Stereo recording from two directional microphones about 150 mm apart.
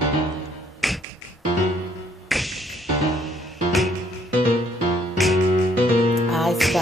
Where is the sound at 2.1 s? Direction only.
Centre (ahead or behind).